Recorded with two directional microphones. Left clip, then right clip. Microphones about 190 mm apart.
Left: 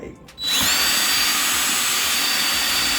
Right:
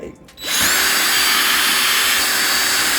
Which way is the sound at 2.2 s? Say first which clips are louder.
Right 3 dB; 30° right (ahead or behind).